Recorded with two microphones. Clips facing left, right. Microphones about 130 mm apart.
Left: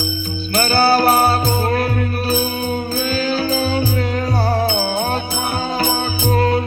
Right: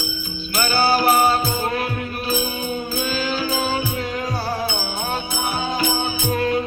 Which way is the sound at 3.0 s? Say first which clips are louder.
Left 4 dB; 40° left (ahead or behind).